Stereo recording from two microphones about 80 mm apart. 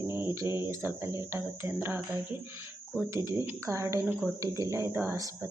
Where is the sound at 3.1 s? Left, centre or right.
Right.